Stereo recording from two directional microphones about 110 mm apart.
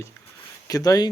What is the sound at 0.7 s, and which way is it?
Speech, 35° left (ahead or behind).